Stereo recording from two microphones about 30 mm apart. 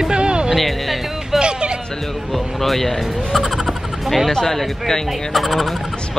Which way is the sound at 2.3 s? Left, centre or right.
Centre.